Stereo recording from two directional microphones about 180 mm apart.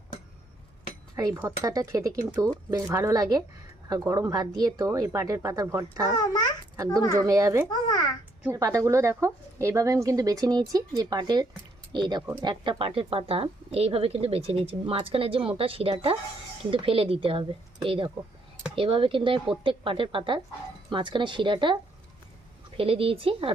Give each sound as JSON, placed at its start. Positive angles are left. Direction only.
{"t": 1.1, "sound": "a woman's voice", "side_deg": -20}
{"t": 6.1, "sound": "a child's voice", "side_deg": 25}
{"t": 7.3, "sound": "speech", "side_deg": -15}
{"t": 7.7, "sound": "babbling", "side_deg": 25}
{"t": 8.4, "sound": "a woman's voice", "side_deg": -15}
{"t": 22.8, "sound": "speech", "side_deg": -30}